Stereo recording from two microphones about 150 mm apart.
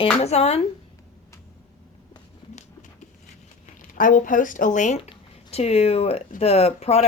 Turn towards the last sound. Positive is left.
turn(degrees=45)  # may be behind; listen again after turning